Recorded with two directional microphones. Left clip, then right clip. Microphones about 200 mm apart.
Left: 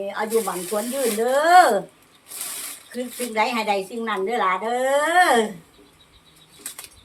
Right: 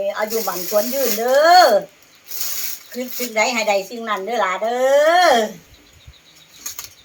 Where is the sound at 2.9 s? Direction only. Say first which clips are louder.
Right 3 dB; centre (ahead or behind).